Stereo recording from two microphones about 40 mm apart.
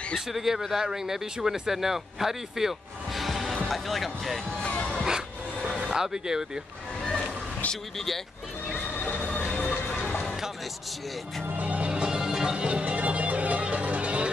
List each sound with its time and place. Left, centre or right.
0.1 s speech: centre
5.0 s a sound: centre
6.0 s speech: centre
7.7 s speech: centre
8.7 s a sound: left
11.6 s music: right
12.0 s music: centre
12.6 s music: right